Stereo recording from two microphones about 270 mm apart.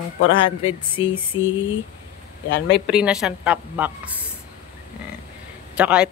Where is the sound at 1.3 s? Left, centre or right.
Left.